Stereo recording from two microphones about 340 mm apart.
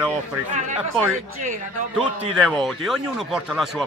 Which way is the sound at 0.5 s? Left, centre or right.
Right.